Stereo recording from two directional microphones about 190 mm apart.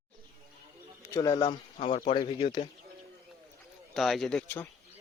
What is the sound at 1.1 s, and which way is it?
Speech, 15° left (ahead or behind).